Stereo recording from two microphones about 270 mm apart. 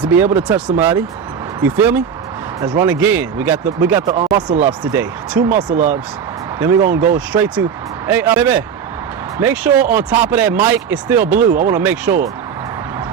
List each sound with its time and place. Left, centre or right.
0.1 s speech: centre